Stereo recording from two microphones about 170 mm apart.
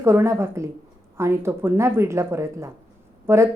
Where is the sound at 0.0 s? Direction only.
15° right (ahead or behind).